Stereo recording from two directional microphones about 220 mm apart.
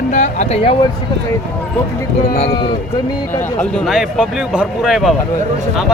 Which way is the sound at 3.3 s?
5° left (ahead or behind).